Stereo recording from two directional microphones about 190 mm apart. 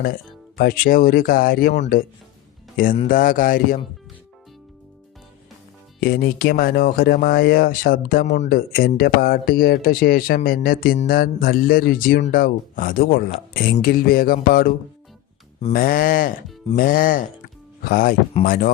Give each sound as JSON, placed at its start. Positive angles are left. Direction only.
{"t": 0.0, "sound": "speech", "side_deg": 50}
{"t": 3.1, "sound": "speech", "side_deg": 45}
{"t": 6.0, "sound": "speech", "side_deg": 50}
{"t": 15.7, "sound": "speech", "side_deg": 50}